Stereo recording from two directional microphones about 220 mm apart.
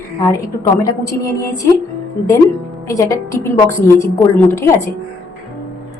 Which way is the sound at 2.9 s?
15° left (ahead or behind).